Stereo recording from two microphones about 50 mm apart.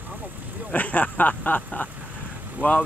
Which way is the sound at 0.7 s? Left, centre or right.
Left.